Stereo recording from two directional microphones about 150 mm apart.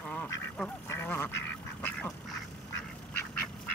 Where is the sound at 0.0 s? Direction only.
5° left (ahead or behind).